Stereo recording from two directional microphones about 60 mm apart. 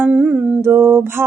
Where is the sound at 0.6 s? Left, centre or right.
Right.